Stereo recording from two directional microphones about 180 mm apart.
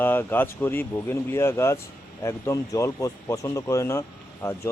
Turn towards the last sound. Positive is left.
turn(degrees=15)  # may be behind; listen again after turning